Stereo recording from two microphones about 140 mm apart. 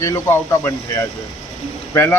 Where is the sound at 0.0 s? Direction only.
20° left (ahead or behind).